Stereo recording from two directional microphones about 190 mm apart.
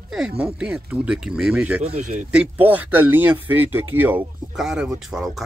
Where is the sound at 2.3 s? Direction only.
10° right (ahead or behind).